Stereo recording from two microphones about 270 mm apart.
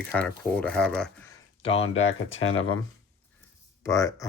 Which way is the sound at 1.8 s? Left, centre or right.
Left.